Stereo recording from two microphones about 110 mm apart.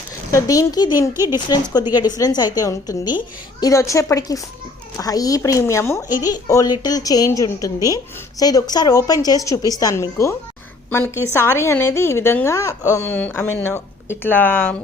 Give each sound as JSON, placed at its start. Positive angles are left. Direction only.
{"t": 0.3, "sound": "a woman's voice", "side_deg": 30}
{"t": 10.8, "sound": "a woman's voice", "side_deg": 15}